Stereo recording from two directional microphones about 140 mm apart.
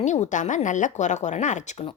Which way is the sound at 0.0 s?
60° left (ahead or behind).